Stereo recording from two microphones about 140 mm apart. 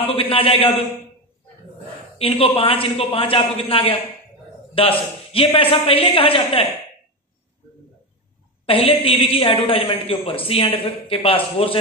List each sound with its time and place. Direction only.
0.0 s a woman's voice: 40° left (ahead or behind)
2.1 s a woman's voice: 40° left (ahead or behind)
8.6 s a woman's voice: 40° left (ahead or behind)